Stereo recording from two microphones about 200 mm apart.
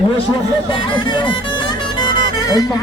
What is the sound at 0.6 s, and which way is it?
Music, 25° left (ahead or behind).